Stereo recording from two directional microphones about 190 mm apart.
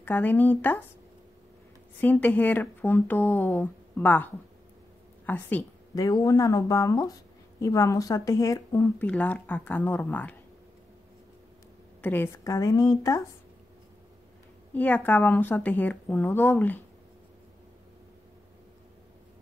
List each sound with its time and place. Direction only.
0.0 s speech: 10° left (ahead or behind)
2.0 s a woman's voice: 10° left (ahead or behind)
12.0 s speech: 10° left (ahead or behind)
14.7 s speech: 10° left (ahead or behind)